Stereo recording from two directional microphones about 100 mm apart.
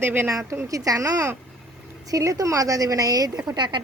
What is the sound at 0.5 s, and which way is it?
A woman's voice, 35° right (ahead or behind).